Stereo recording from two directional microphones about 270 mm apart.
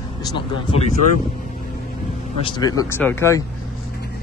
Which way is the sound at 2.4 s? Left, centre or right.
Centre.